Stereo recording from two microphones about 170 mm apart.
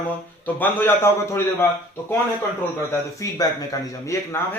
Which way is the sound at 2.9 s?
20° left (ahead or behind).